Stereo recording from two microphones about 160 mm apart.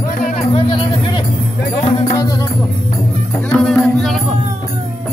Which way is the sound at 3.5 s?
5° left (ahead or behind).